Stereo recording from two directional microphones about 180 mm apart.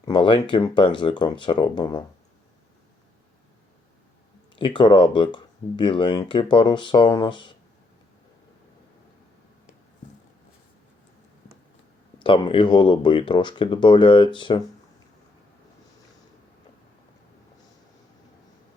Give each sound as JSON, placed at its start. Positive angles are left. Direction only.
{"t": 0.0, "sound": "speech", "side_deg": 25}
{"t": 4.5, "sound": "speech", "side_deg": 25}
{"t": 12.2, "sound": "speech", "side_deg": 30}